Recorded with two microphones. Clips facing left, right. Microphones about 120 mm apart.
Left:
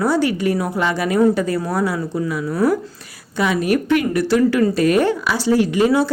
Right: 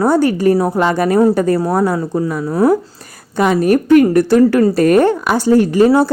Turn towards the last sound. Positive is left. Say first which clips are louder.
# right 5 dB
turn(degrees=-40)  # may be behind; listen again after turning